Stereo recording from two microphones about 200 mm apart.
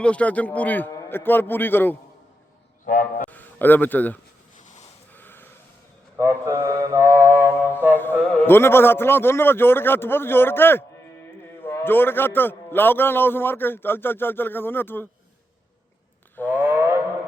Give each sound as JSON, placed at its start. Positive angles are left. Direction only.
{"t": 0.0, "sound": "a man's voice", "side_deg": 5}
{"t": 2.8, "sound": "goose", "side_deg": 40}
{"t": 3.2, "sound": "speech", "side_deg": 10}
{"t": 5.1, "sound": "a sound", "side_deg": 10}
{"t": 6.1, "sound": "mantra", "side_deg": -15}
{"t": 8.3, "sound": "a man's voice", "side_deg": 10}
{"t": 16.5, "sound": "wild animals", "side_deg": -10}